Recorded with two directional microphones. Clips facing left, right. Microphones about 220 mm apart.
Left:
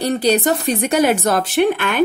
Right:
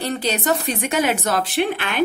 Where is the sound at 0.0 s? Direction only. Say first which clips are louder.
Left 7 dB; 40° left (ahead or behind).